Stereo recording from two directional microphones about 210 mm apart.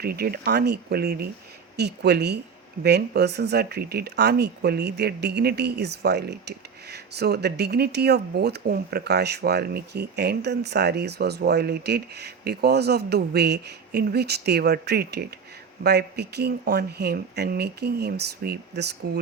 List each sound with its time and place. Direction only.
0.0 s speech: 45° right (ahead or behind)